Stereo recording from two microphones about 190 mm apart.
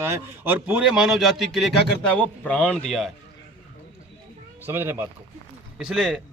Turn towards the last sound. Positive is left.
turn(degrees=0)  # may be behind; listen again after turning